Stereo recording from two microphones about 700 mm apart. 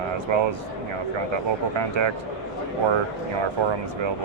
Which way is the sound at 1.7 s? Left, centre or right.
Right.